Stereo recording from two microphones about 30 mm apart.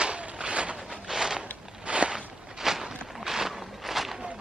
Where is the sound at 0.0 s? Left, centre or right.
Right.